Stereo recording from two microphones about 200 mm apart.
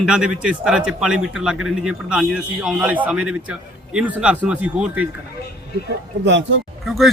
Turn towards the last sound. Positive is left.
turn(degrees=0)  # may be behind; listen again after turning